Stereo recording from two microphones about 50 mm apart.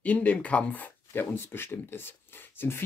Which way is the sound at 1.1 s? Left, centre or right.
Left.